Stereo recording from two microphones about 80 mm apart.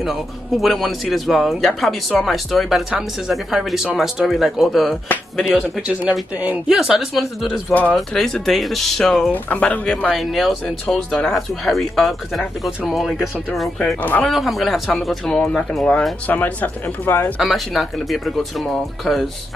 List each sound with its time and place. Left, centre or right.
0.0 s speech: centre
5.4 s speech: centre
9.3 s speech: centre
10.1 s speech: centre
14.3 s speech: centre; by 17.3 s left
17.4 s speech: centre